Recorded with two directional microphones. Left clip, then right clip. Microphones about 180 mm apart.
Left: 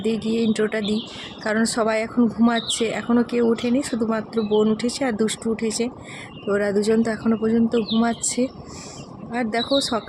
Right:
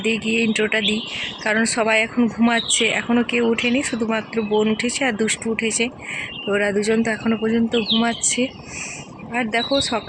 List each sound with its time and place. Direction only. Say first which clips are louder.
0.3 s speech: right 3 dB; 10° left (ahead or behind)